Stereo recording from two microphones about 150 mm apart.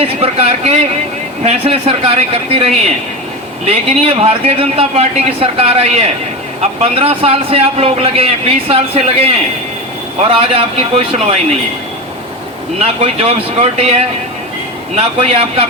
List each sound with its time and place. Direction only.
0.0 s a man's voice: 40° right (ahead or behind)
13.0 s a man's voice: 45° right (ahead or behind)